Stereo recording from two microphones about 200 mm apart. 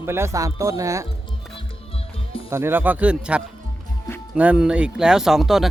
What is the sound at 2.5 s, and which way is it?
Speech, 10° right (ahead or behind).